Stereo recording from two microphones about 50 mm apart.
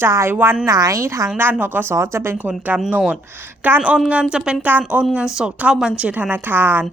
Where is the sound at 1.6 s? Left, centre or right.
Right.